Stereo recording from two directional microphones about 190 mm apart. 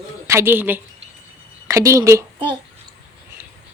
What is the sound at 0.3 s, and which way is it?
Speech, 10° right (ahead or behind).